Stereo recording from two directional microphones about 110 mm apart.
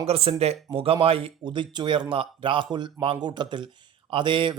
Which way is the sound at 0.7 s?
55° right (ahead or behind).